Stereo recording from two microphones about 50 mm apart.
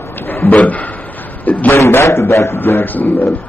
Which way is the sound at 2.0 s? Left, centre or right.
Left.